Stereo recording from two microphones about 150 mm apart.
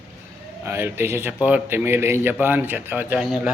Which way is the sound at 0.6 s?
15° right (ahead or behind).